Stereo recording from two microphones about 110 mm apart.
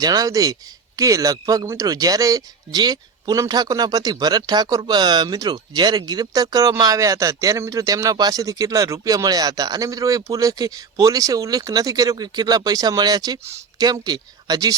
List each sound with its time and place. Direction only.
0.0 s speech: 35° right (ahead or behind)